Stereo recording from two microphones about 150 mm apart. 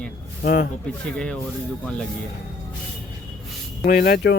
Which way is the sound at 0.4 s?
85° left.